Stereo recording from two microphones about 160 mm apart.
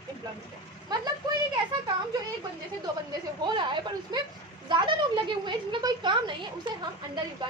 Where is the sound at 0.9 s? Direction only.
25° right (ahead or behind).